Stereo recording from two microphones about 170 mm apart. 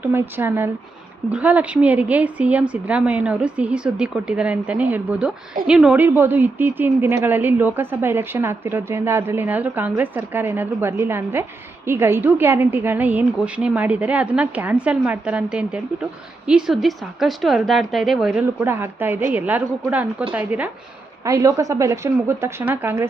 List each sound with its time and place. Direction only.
0.0 s a woman's voice: 15° right (ahead or behind)
18.6 s a woman's voice: 15° right (ahead or behind)